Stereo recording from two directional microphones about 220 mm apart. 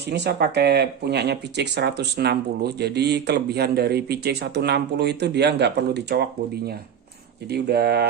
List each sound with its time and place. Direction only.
0.0 s speech: 50° right (ahead or behind)
7.5 s speech: 45° right (ahead or behind)